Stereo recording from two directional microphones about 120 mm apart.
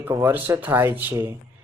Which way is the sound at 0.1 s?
20° right (ahead or behind).